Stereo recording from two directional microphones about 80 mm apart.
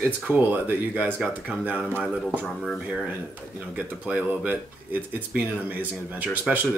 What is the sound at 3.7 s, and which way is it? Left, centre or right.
Speech, centre.